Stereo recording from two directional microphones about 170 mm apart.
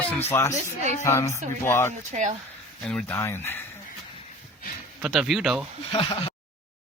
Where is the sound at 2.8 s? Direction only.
5° left (ahead or behind).